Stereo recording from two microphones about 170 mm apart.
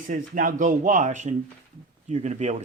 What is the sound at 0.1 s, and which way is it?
Speech, 50° right (ahead or behind).